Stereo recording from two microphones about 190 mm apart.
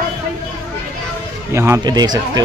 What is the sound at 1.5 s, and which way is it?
Speech, 15° right (ahead or behind).